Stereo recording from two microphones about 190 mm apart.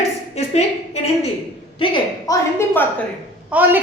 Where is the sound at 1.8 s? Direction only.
25° left (ahead or behind).